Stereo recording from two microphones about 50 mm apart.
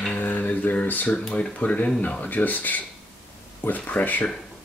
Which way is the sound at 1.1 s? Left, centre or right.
Left.